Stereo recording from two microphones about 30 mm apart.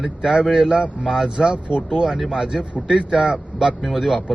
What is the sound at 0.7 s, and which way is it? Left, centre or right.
Speech, right.